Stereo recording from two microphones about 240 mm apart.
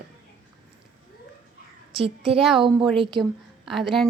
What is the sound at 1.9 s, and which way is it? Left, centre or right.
A woman's voice, right.